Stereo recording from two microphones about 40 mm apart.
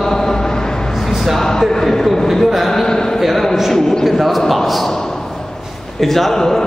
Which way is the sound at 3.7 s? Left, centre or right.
Centre.